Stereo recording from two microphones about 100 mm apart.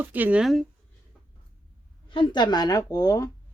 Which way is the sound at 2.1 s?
50° left (ahead or behind).